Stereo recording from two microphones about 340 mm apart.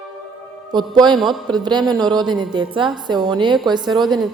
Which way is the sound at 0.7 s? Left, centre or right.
Centre.